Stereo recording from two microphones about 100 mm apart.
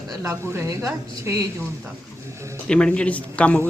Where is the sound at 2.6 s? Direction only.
10° left (ahead or behind).